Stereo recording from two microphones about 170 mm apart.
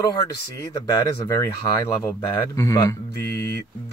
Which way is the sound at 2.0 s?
20° left (ahead or behind).